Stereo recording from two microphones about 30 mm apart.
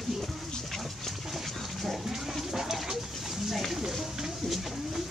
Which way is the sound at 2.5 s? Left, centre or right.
Centre.